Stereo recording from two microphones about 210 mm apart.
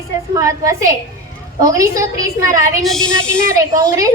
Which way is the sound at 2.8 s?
Centre (ahead or behind).